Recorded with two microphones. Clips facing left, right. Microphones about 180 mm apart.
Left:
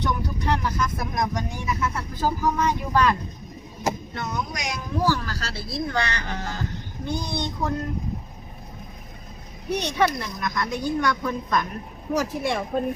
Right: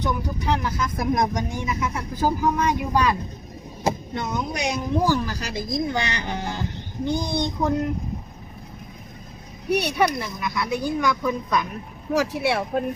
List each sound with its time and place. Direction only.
0.0 s speech: 10° right (ahead or behind)
1.1 s speech: 20° right (ahead or behind)
9.6 s speech: 10° right (ahead or behind)